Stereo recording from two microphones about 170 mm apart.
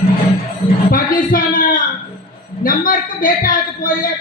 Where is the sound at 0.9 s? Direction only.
55° left (ahead or behind).